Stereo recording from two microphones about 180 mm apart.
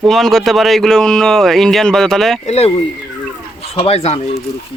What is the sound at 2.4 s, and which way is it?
Speech, 35° left (ahead or behind).